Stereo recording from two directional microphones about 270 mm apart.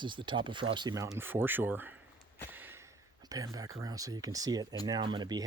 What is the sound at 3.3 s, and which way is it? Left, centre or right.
Speech, centre.